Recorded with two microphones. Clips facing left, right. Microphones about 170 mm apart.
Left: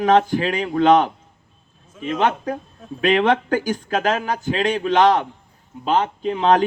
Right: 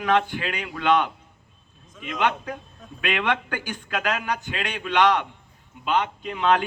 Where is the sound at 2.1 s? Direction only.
40° left (ahead or behind).